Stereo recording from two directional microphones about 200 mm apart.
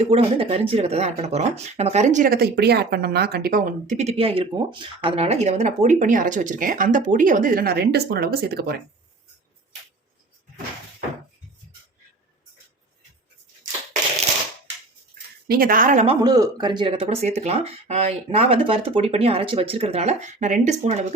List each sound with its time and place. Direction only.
0.1 s speech: 30° right (ahead or behind); by 8.7 s 50° right (ahead or behind)
15.4 s speech: 45° right (ahead or behind)
16.2 s speech: 20° right (ahead or behind); by 21.1 s 35° right (ahead or behind)